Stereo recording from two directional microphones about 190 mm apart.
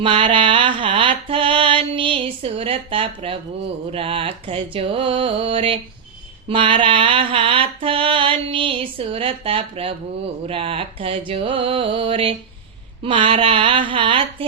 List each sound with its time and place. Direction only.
0.0 s mantra: 25° right (ahead or behind)